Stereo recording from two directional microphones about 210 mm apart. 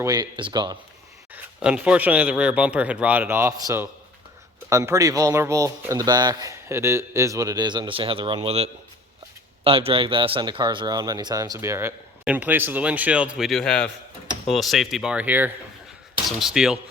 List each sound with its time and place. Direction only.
0.0 s speech: 20° right (ahead or behind)
1.3 s a man's voice: 5° right (ahead or behind)